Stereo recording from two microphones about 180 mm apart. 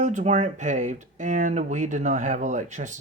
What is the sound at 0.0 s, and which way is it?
Speech, 40° right (ahead or behind).